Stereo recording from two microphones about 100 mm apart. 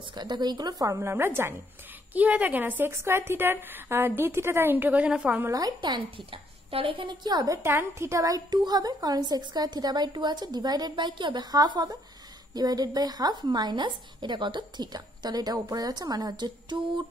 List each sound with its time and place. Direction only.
0.0 s a woman's voice: 45° right (ahead or behind)
0.9 s a woman's voice: 25° right (ahead or behind)
5.4 s a woman's voice: 35° right (ahead or behind)
7.6 s a woman's voice: 25° right (ahead or behind); by 17.0 s 50° right (ahead or behind)